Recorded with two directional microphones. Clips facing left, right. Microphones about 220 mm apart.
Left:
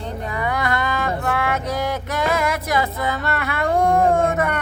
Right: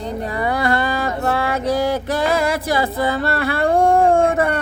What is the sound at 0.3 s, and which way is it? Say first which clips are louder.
Music: right 3 dB; 35° right (ahead or behind).